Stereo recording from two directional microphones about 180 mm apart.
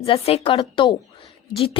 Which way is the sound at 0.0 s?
35° left (ahead or behind).